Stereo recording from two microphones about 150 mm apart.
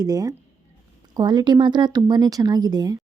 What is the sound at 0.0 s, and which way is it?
Speech, 25° right (ahead or behind).